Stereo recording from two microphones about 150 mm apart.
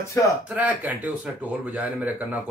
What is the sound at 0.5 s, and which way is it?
Speech, 10° right (ahead or behind).